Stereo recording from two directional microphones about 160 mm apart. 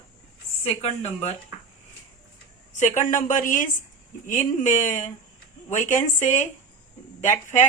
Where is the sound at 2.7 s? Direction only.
50° left (ahead or behind).